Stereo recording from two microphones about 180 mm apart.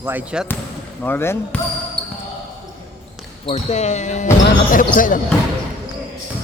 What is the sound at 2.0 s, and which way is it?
Basketball bounce, 5° left (ahead or behind).